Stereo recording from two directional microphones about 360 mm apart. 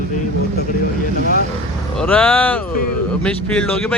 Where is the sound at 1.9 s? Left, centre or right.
Centre.